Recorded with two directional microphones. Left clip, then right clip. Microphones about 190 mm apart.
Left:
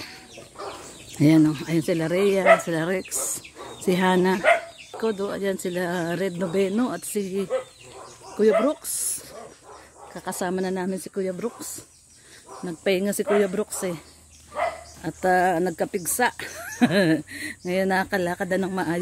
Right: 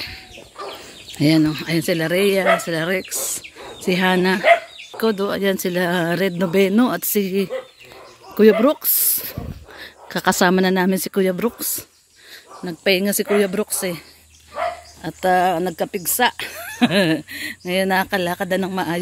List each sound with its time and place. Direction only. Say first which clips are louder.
1.2 s speech: right 2 dB; 5° left (ahead or behind)
3.3 s bird: right 4 dB; 10° left (ahead or behind)
5.0 s speech: right 6 dB; 20° right (ahead or behind)
12.6 s speech: right 5 dB; 10° right (ahead or behind)